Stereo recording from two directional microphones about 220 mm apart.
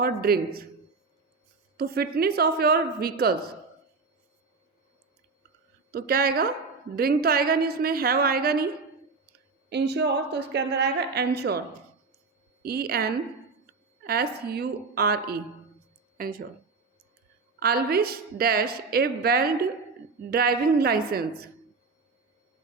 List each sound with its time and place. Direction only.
0.0 s a woman's voice: 45° right (ahead or behind)
1.7 s a woman's voice: 45° right (ahead or behind)
5.9 s a woman's voice: 45° right (ahead or behind)
12.6 s a woman's voice: 45° right (ahead or behind)
17.6 s a woman's voice: 45° right (ahead or behind)